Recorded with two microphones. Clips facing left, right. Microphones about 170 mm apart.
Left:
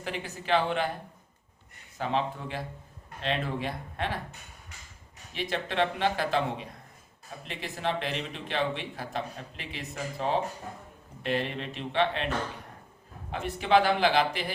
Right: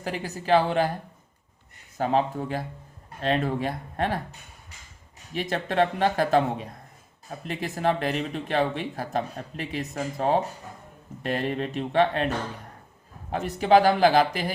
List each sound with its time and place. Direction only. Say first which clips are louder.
0.0 s speech: right 4 dB; 40° right (ahead or behind)
2.0 s speech: right 6 dB; 40° right (ahead or behind)
13.3 s speech: right 5 dB; 40° right (ahead or behind)